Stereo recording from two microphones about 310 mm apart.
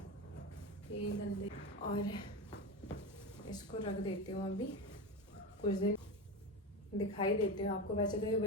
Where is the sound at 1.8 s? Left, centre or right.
Centre.